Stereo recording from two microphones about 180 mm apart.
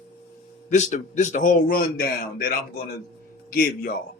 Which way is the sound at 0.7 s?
40° left (ahead or behind).